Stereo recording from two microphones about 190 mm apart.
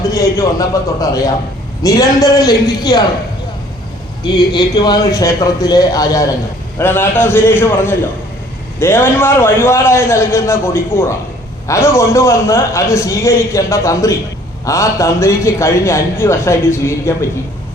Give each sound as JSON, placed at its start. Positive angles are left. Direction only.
{"t": 0.1, "sound": "a man's voice", "side_deg": 15}
{"t": 4.2, "sound": "a man's voice", "side_deg": 25}